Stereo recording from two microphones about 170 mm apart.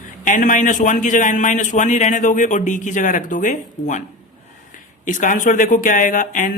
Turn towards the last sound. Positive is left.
turn(degrees=50)  # may be behind; listen again after turning